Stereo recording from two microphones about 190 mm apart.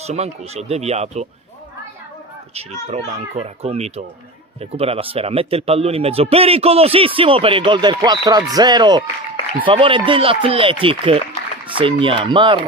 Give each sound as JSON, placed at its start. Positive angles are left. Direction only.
{"t": 0.0, "sound": "speech", "side_deg": -35}
{"t": 2.5, "sound": "speech", "side_deg": -35}